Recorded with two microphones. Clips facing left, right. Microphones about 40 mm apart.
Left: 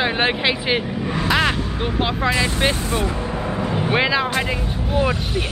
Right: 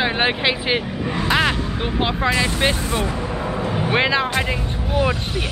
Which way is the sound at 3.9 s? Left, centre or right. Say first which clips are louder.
Right 1 dB; centre.